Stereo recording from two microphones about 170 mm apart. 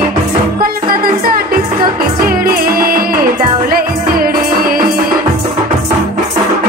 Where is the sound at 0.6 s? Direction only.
60° right (ahead or behind).